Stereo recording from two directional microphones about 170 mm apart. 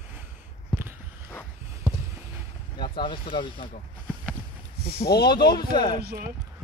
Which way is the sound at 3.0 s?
30° left (ahead or behind).